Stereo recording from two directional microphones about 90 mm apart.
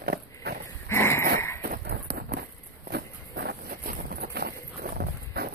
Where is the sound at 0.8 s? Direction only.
30° left (ahead or behind).